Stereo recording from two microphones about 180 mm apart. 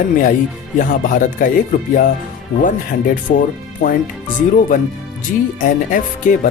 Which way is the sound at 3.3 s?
45° left (ahead or behind).